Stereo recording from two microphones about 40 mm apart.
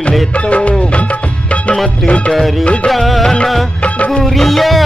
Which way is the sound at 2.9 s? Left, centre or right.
Centre.